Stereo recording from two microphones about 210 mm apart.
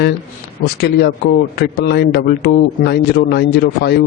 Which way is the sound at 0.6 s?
50° left (ahead or behind).